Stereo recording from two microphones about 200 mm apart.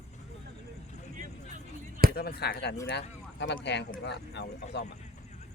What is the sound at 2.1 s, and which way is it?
Speech, 50° left (ahead or behind).